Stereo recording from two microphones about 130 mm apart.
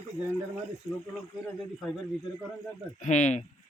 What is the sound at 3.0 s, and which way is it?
Speech, 65° left (ahead or behind).